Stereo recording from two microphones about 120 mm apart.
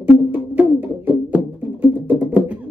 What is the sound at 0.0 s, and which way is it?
Music, 15° right (ahead or behind).